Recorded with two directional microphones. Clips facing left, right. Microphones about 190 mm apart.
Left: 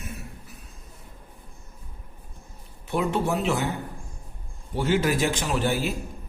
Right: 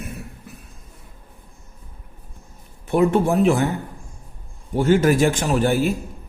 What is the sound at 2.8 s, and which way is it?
Speech, 50° right (ahead or behind).